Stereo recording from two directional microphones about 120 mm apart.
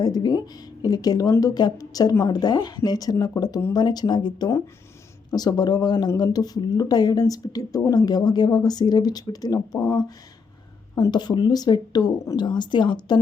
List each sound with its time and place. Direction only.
0.0 s speech: 35° left (ahead or behind)
9.7 s speech: 15° left (ahead or behind)
10.9 s speech: 35° left (ahead or behind)